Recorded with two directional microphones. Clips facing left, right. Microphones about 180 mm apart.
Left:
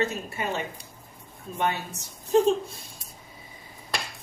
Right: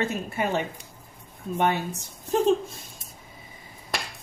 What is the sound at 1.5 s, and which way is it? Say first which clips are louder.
Speech: right 4 dB; 50° right (ahead or behind).